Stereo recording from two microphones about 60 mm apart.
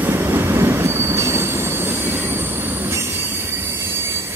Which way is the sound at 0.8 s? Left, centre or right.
Right.